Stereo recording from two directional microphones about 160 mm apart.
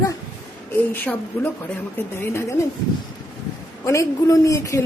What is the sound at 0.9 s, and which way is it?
A woman's voice, 10° left (ahead or behind).